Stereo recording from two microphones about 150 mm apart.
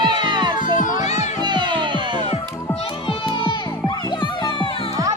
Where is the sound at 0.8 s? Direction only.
55° left (ahead or behind).